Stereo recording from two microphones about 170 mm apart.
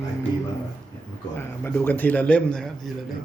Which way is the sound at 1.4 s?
15° left (ahead or behind).